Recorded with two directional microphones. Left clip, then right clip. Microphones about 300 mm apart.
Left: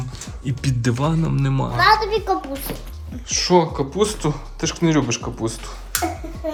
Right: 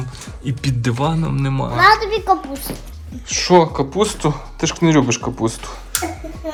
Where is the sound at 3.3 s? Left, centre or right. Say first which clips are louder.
Right 4 dB; centre.